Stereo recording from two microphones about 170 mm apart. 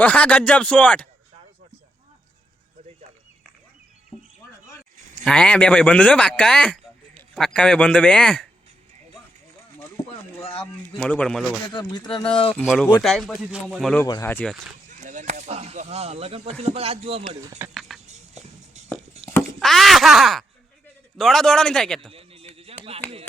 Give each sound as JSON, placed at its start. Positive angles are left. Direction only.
{"t": 0.0, "sound": "speech", "side_deg": 10}
{"t": 5.2, "sound": "speech", "side_deg": 5}
{"t": 10.4, "sound": "speech", "side_deg": 35}
{"t": 10.9, "sound": "speech", "side_deg": 5}
{"t": 11.7, "sound": "speech", "side_deg": 25}
{"t": 12.6, "sound": "speech", "side_deg": 0}
{"t": 14.0, "sound": "speech", "side_deg": 15}
{"t": 14.8, "sound": "speech", "side_deg": -45}
{"t": 17.7, "sound": "a sound", "side_deg": 0}
{"t": 18.0, "sound": "music", "side_deg": -40}
{"t": 19.2, "sound": "a sound", "side_deg": 5}
{"t": 19.5, "sound": "speech", "side_deg": 0}
{"t": 22.1, "sound": "a sound", "side_deg": -35}